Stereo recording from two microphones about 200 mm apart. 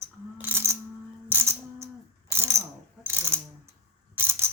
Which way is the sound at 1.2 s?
10° right (ahead or behind).